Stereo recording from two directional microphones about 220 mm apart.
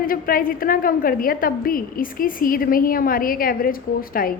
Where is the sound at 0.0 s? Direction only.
40° left (ahead or behind).